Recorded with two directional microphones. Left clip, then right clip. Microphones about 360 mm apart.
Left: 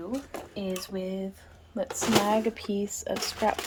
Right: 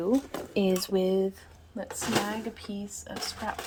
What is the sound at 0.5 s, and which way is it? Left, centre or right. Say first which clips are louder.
Speech: right 8 dB; right.